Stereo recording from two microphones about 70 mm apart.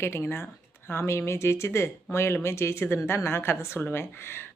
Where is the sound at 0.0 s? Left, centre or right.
Left.